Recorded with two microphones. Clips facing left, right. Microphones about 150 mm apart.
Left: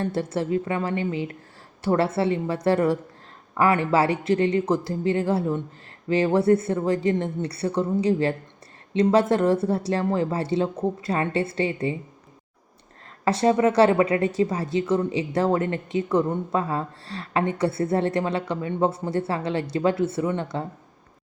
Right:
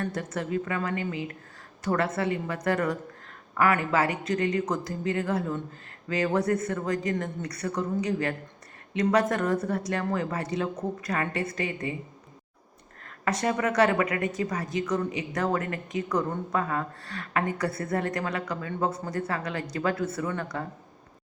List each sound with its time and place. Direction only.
0.0 s a woman's voice: 30° left (ahead or behind)
13.2 s a woman's voice: 30° left (ahead or behind)